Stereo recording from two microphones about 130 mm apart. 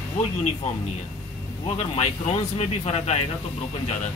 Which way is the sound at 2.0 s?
55° left (ahead or behind).